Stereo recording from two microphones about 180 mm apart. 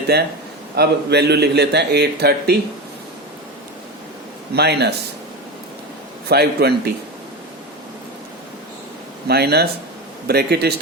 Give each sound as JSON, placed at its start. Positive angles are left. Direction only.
{"t": 0.1, "sound": "a man's voice", "side_deg": -65}
{"t": 4.5, "sound": "a man's voice", "side_deg": -65}
{"t": 6.2, "sound": "a man's voice", "side_deg": -60}
{"t": 9.2, "sound": "a man's voice", "side_deg": -65}